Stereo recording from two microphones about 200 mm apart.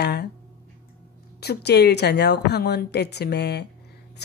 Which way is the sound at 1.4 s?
55° left (ahead or behind).